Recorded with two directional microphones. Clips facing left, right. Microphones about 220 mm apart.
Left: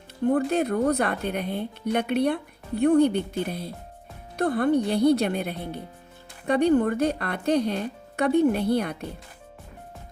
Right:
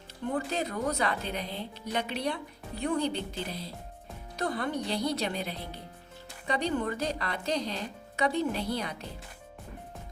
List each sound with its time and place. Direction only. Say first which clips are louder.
0.3 s speech: left 9 dB; 55° left (ahead or behind)